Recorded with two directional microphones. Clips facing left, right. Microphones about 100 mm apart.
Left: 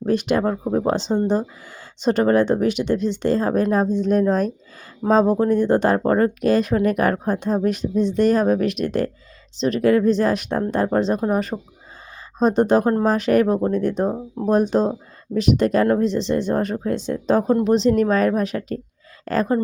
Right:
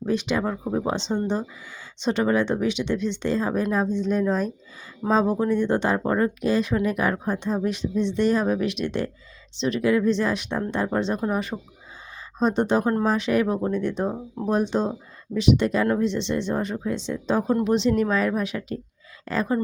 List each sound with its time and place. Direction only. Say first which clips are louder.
0.0 s speech: left 5 dB; 50° left (ahead or behind)
11.5 s speech: left 4 dB; 25° left (ahead or behind)
12.4 s speech: left 5 dB; 45° left (ahead or behind)